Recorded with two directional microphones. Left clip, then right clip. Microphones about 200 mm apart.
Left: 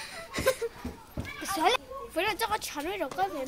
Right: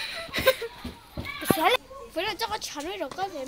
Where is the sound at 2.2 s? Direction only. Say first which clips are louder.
Even; 10° right (ahead or behind).